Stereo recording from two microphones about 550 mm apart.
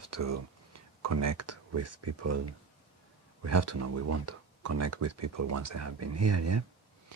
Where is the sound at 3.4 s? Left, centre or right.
Right.